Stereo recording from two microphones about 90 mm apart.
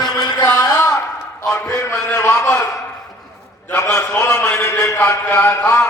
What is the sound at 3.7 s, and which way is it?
A man's voice, 30° left (ahead or behind).